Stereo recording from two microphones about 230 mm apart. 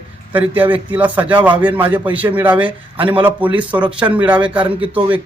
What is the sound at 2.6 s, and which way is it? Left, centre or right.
Speech, right.